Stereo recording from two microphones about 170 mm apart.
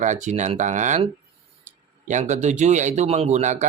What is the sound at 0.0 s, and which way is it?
Speech, 45° right (ahead or behind).